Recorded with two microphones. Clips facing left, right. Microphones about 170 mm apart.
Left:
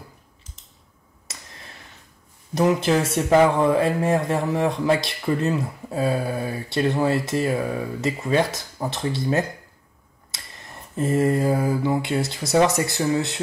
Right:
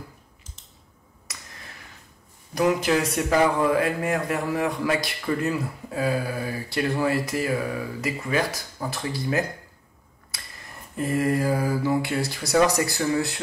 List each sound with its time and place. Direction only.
1.3 s a sound: 25° left (ahead or behind)
2.5 s speech: 25° left (ahead or behind)
11.0 s speech: 25° left (ahead or behind)